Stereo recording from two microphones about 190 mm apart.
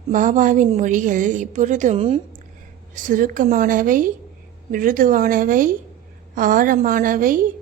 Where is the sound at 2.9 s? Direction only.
45° right (ahead or behind).